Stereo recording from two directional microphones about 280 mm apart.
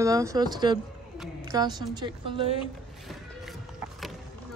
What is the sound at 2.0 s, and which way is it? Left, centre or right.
Speech, centre.